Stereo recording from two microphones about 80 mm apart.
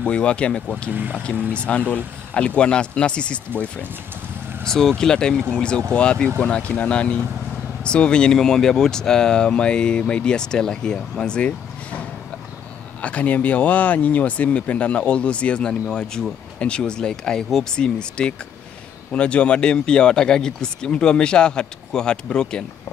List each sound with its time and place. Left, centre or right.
0.0 s speech: centre
0.9 s speech: right
1.5 s speech: centre
13.0 s speech: centre